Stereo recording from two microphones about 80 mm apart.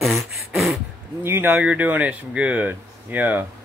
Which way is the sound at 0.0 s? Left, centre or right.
Centre.